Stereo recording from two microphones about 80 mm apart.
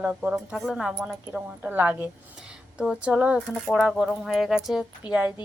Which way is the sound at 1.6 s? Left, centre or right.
Right.